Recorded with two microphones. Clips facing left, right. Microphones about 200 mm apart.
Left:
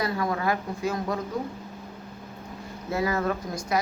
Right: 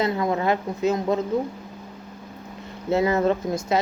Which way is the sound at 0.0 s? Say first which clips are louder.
Right 4 dB; 20° right (ahead or behind).